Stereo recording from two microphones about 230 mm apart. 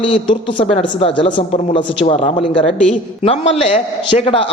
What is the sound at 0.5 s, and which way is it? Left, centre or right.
A man's voice, left.